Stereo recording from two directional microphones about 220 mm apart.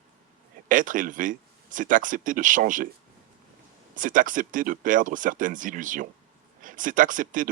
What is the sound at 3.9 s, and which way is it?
Speech, 35° right (ahead or behind).